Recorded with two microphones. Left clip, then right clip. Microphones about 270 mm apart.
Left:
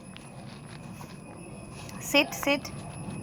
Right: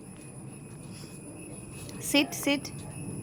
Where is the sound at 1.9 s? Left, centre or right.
Centre.